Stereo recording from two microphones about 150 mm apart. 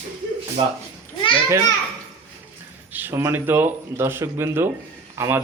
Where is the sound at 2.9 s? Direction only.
15° right (ahead or behind).